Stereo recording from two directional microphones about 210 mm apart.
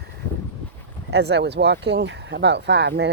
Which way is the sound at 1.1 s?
55° right (ahead or behind).